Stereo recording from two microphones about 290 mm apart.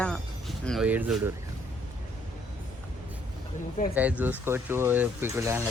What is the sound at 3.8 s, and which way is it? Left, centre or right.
Speech, left.